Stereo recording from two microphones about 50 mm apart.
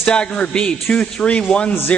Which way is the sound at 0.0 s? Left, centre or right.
Centre.